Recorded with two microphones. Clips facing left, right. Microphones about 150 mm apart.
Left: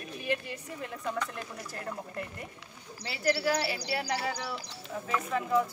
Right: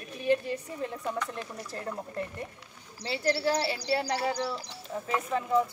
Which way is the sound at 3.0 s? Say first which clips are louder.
Right 1 dB; 30° right (ahead or behind).